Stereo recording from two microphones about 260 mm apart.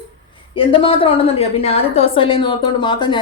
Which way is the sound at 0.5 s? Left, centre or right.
Centre.